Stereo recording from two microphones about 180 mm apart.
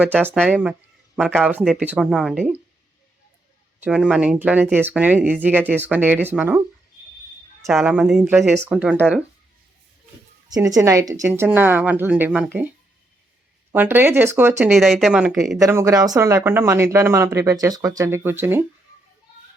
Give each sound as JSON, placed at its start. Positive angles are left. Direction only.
{"t": 0.0, "sound": "speech", "side_deg": -10}
{"t": 3.8, "sound": "speech", "side_deg": -5}
{"t": 7.7, "sound": "speech", "side_deg": -5}
{"t": 10.5, "sound": "speech", "side_deg": -20}
{"t": 13.7, "sound": "speech", "side_deg": -10}
{"t": 15.5, "sound": "speech", "side_deg": -15}